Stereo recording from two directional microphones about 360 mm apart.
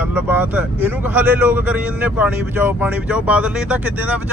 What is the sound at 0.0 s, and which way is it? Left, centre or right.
Speech, centre.